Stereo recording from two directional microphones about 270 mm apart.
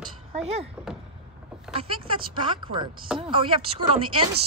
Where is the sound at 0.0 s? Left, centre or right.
Right.